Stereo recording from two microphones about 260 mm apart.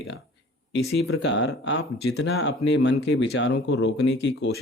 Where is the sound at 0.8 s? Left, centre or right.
Left.